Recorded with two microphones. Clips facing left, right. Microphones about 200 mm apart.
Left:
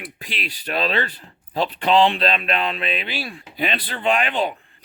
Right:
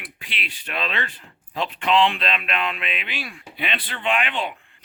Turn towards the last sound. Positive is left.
turn(degrees=40)  # may be behind; listen again after turning